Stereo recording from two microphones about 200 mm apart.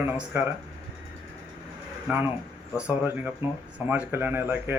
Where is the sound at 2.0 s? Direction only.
10° right (ahead or behind).